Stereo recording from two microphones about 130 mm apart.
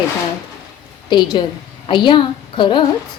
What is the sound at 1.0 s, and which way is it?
A woman's voice, 35° left (ahead or behind).